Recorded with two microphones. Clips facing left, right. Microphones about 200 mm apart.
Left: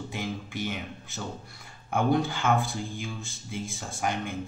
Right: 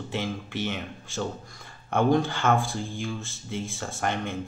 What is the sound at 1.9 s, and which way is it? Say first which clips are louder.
Speech: right 3 dB; 5° left (ahead or behind).